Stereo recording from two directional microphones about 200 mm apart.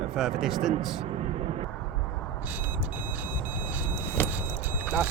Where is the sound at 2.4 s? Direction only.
10° right (ahead or behind).